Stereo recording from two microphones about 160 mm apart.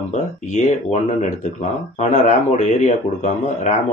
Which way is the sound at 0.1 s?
50° left (ahead or behind).